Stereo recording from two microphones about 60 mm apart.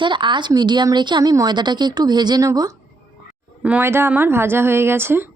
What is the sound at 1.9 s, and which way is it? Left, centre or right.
Speech, right.